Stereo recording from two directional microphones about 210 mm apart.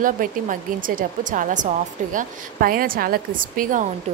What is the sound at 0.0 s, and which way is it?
A woman's voice, 40° right (ahead or behind).